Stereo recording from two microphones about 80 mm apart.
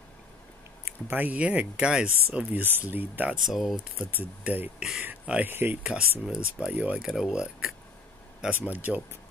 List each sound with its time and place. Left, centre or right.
1.0 s speech: right
2.2 s speech: right
3.4 s speech: centre
4.2 s speech: right
6.2 s speech: centre
6.7 s speech: centre
7.1 s speech: centre
8.4 s speech: right